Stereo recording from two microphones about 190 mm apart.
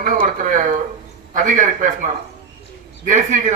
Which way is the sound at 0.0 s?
45° right (ahead or behind).